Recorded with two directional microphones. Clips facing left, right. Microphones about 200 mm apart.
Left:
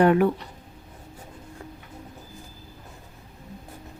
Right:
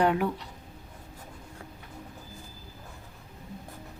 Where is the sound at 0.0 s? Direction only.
60° left (ahead or behind).